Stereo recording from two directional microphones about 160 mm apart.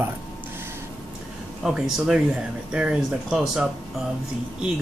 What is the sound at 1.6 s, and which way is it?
Speech, centre (ahead or behind).